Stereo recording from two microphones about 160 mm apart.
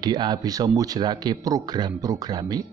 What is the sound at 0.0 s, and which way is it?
Speech, 25° right (ahead or behind).